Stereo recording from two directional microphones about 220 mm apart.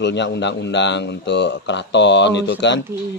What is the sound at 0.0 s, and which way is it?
Speech, 55° left (ahead or behind).